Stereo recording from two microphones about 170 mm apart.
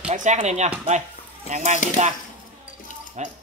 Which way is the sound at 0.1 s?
45° right (ahead or behind).